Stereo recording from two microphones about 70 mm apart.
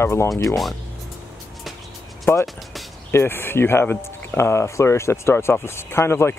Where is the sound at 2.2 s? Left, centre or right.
Left.